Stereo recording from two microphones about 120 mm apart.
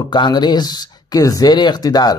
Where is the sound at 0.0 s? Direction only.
40° left (ahead or behind).